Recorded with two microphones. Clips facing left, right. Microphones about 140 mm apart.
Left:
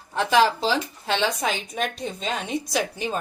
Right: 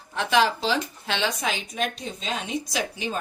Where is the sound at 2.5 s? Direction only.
60° left (ahead or behind).